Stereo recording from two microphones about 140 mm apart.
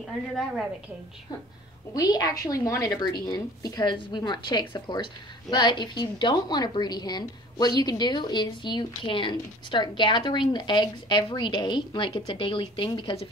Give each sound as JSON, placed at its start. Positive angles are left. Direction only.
{"t": 2.0, "sound": "a woman's voice", "side_deg": 25}